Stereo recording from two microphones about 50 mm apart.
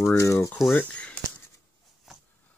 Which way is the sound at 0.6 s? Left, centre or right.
Centre.